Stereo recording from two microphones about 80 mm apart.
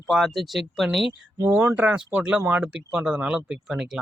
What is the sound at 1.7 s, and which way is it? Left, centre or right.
Speech, centre.